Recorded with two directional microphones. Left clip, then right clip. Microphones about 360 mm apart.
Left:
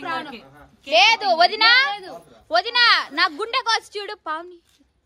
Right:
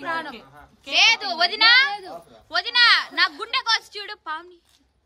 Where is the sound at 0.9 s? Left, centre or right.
Centre.